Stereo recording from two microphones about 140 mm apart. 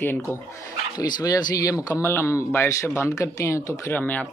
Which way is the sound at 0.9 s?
30° left (ahead or behind).